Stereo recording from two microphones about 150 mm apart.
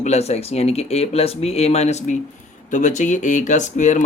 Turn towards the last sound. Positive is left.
turn(degrees=55)  # may be behind; listen again after turning